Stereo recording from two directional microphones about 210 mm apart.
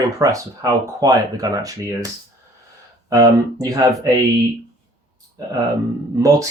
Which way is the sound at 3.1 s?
15° right (ahead or behind).